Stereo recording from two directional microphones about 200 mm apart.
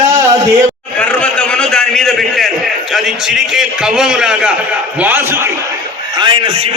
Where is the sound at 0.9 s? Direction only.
5° left (ahead or behind).